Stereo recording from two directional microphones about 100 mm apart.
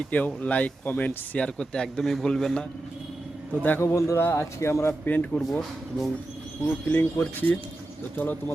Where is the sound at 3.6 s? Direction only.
25° left (ahead or behind).